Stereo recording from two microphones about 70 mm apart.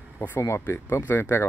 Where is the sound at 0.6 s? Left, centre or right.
Left.